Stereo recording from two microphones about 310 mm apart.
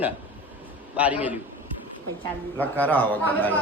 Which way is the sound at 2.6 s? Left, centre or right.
Centre.